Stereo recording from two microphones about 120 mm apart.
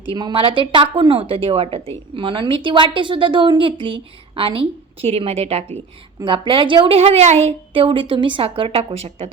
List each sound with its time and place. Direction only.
0.1 s speech: 45° right (ahead or behind); by 5.7 s 60° right (ahead or behind)
6.2 s speech: 45° right (ahead or behind)